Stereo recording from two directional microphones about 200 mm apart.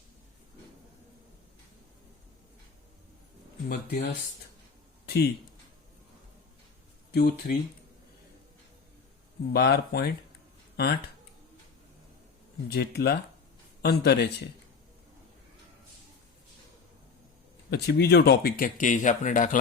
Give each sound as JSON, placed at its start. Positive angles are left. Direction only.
{"t": 3.7, "sound": "speech", "side_deg": 50}
{"t": 7.1, "sound": "speech", "side_deg": 50}
{"t": 9.5, "sound": "speech", "side_deg": 50}
{"t": 12.7, "sound": "speech", "side_deg": 55}
{"t": 17.7, "sound": "speech", "side_deg": 55}